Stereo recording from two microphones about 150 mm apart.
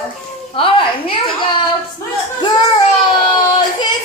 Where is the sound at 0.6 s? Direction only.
35° left (ahead or behind).